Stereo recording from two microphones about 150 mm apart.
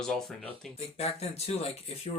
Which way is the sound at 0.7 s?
45° left (ahead or behind).